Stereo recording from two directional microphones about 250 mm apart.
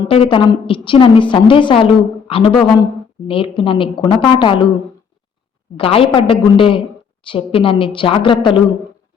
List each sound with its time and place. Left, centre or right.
0.0 s a woman's voice: left
5.7 s a woman's voice: left